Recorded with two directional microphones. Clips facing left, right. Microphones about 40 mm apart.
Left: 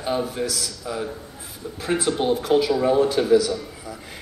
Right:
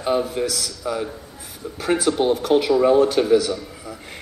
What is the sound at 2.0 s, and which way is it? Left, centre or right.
Speech, right.